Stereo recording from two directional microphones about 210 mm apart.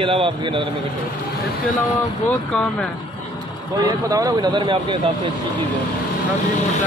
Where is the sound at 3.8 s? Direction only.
15° right (ahead or behind).